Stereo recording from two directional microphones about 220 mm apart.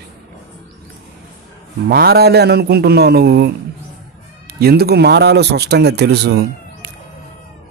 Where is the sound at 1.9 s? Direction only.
45° right (ahead or behind).